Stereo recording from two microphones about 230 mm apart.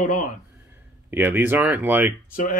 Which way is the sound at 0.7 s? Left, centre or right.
Centre.